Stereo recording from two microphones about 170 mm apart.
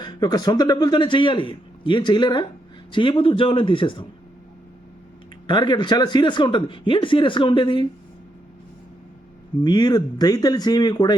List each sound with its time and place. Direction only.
0.0 s a man's voice: 25° left (ahead or behind)
5.5 s a man's voice: 25° left (ahead or behind)
9.6 s a man's voice: 25° left (ahead or behind)